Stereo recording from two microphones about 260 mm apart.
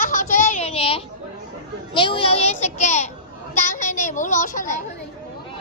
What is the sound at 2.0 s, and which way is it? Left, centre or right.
A child's voice, centre.